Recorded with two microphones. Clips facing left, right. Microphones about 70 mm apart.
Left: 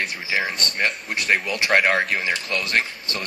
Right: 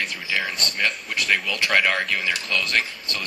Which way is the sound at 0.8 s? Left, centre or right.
Left.